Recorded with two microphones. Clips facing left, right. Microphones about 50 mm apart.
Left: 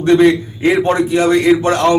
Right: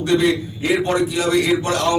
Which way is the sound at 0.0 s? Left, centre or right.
Left.